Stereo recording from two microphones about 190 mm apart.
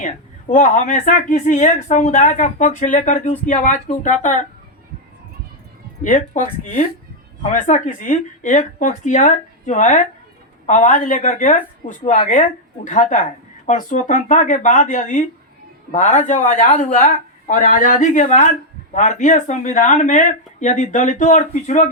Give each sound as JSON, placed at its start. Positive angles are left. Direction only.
{"t": 0.0, "sound": "speech", "side_deg": 40}
{"t": 6.0, "sound": "speech", "side_deg": 40}